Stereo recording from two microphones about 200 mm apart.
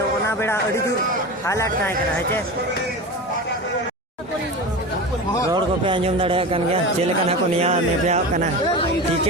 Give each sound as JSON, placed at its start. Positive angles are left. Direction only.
{"t": 0.3, "sound": "speech", "side_deg": 10}
{"t": 5.5, "sound": "a man's voice", "side_deg": -25}